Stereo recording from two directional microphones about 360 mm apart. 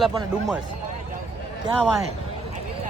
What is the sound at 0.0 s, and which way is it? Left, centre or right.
Speech, centre.